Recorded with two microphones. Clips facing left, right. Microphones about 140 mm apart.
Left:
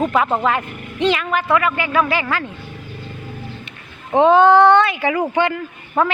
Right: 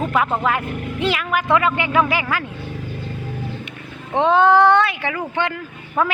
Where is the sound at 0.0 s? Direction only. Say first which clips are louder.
Left 2 dB; centre (ahead or behind).